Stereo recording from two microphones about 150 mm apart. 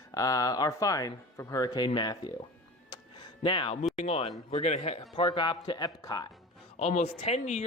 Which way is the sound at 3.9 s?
45° left (ahead or behind).